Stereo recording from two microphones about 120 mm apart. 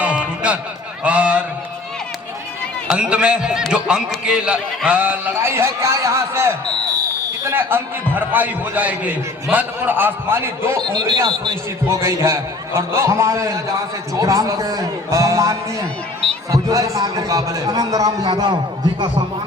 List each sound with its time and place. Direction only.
0.0 s music: 10° right (ahead or behind)
1.0 s a sound: 10° right (ahead or behind)
2.8 s a man's voice: 10° right (ahead or behind)
11.2 s a man's voice: 30° right (ahead or behind)